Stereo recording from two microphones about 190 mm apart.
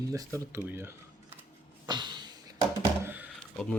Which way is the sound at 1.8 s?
25° right (ahead or behind).